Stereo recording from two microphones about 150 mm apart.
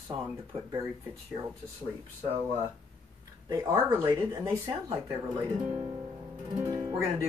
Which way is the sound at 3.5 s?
20° right (ahead or behind).